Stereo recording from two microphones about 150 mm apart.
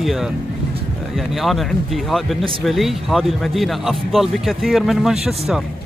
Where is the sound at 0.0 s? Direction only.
Centre (ahead or behind).